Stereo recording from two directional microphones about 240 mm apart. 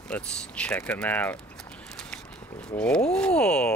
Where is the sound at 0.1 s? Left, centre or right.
Centre.